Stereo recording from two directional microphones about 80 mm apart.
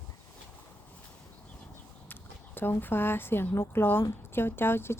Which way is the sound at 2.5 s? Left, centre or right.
Left.